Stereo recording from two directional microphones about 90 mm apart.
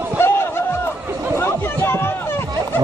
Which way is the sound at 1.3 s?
25° left (ahead or behind).